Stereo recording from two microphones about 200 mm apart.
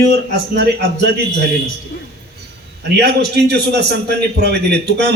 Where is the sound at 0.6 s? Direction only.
55° right (ahead or behind).